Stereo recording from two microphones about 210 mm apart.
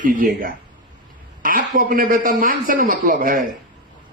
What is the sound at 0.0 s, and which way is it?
Speech, 40° right (ahead or behind).